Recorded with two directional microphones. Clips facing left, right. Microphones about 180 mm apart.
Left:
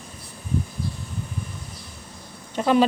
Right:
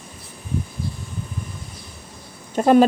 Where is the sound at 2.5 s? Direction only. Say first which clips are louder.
Right 5 dB; 45° right (ahead or behind).